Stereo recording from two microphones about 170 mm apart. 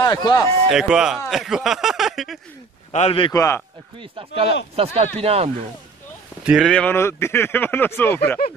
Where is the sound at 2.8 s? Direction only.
35° left (ahead or behind).